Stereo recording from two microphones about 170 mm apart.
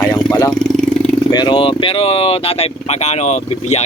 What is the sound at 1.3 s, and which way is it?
Speech, 25° left (ahead or behind).